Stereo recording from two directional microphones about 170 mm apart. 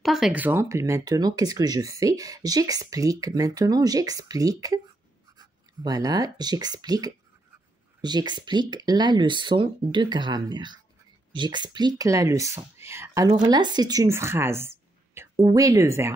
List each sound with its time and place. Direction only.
0.0 s speech: centre (ahead or behind)